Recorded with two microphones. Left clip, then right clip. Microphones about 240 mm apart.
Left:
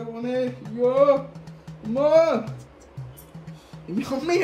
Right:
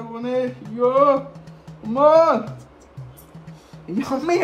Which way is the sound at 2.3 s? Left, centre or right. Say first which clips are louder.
Right 5 dB; centre.